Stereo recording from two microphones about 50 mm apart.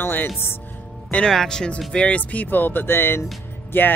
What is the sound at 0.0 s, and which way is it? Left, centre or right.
Speech, left.